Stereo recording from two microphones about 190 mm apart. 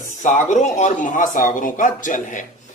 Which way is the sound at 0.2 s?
40° left (ahead or behind).